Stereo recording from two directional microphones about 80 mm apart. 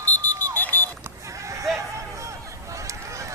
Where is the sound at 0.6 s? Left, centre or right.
Left.